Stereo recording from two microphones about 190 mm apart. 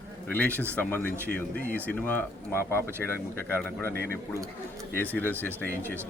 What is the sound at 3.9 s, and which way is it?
Speech, 55° right (ahead or behind).